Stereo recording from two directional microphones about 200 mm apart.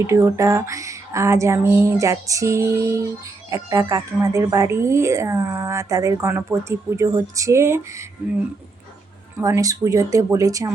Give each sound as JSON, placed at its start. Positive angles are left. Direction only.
{"t": 0.1, "sound": "speech", "side_deg": -15}
{"t": 9.4, "sound": "speech", "side_deg": -15}